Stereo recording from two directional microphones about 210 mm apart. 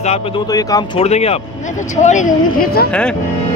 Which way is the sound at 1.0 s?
30° left (ahead or behind).